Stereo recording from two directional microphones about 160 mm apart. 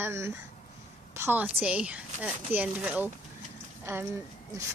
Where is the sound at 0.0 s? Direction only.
15° right (ahead or behind).